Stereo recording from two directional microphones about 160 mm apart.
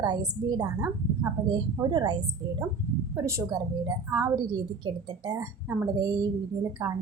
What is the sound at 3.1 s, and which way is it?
A woman's voice, 20° right (ahead or behind).